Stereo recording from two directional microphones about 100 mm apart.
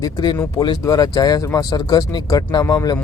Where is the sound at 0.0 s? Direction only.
45° left (ahead or behind).